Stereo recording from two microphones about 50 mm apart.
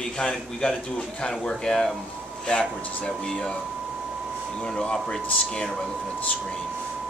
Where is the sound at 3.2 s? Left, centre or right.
Centre.